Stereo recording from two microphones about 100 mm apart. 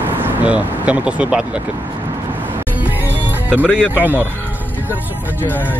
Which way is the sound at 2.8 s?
20° right (ahead or behind).